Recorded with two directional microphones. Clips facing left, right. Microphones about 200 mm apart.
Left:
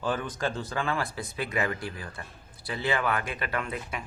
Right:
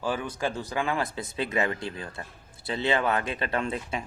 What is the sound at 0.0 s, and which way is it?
Speech, 10° right (ahead or behind).